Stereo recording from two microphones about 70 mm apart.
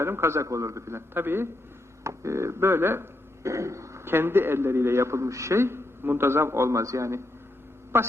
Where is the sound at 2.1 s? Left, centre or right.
Right.